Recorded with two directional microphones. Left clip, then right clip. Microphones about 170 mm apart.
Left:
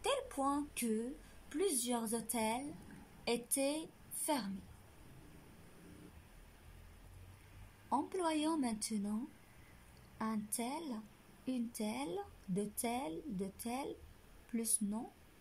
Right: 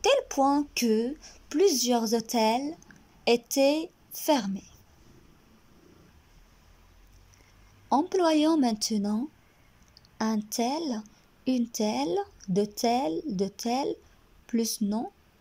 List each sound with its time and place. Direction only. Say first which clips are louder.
0.0 s speech: right 14 dB; 55° right (ahead or behind)
7.9 s speech: right 13 dB; 55° right (ahead or behind)